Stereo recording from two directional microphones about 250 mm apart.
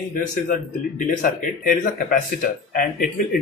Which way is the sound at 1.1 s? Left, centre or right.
Left.